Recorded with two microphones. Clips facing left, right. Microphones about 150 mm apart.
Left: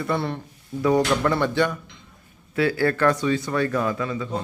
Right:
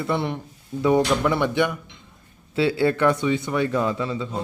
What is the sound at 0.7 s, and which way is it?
Speech, centre (ahead or behind).